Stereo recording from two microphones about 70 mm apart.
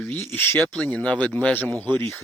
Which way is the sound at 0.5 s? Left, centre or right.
Centre.